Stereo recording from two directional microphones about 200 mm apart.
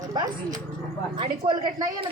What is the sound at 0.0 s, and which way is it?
A woman's voice, 20° right (ahead or behind).